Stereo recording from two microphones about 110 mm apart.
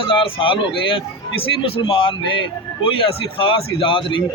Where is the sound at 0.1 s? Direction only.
50° left (ahead or behind).